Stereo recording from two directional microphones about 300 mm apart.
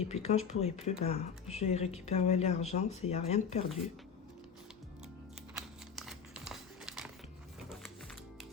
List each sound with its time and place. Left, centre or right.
0.0 s speech: left
5.5 s crumpling: centre